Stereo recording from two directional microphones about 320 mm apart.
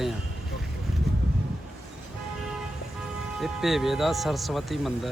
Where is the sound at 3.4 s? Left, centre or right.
Centre.